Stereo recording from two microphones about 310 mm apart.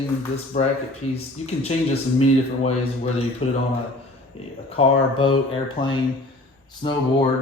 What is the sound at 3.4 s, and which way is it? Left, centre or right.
Speech, centre.